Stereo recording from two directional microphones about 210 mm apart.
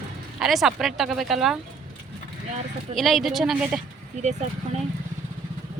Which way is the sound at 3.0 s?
Centre (ahead or behind).